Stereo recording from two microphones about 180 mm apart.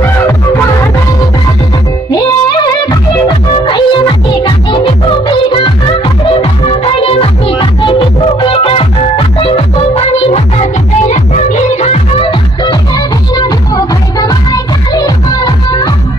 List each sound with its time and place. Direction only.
0.0 s music: 15° left (ahead or behind)
2.0 s music: 20° left (ahead or behind)